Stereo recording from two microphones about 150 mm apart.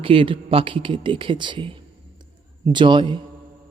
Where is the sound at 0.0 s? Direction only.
35° right (ahead or behind).